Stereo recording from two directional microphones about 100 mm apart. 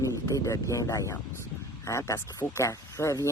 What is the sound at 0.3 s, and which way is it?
Speech, 35° left (ahead or behind).